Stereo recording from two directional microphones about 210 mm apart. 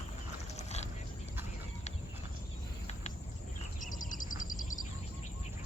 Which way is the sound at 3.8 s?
40° left (ahead or behind).